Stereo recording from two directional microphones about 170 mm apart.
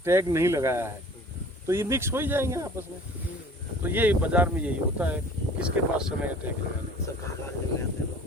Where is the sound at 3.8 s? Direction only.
10° right (ahead or behind).